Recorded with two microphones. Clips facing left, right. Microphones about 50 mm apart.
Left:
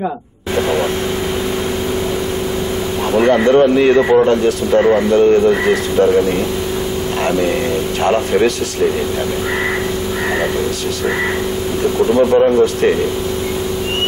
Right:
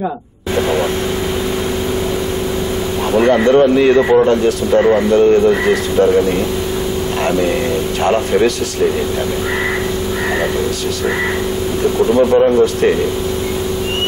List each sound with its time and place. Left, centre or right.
3.1 s a man's voice: centre
7.2 s a man's voice: centre
11.8 s a man's voice: centre